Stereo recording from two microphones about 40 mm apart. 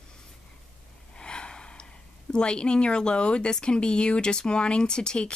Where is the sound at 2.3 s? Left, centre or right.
Left.